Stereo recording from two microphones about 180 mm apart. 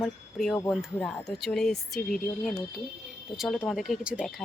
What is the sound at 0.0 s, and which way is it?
Speech, centre (ahead or behind).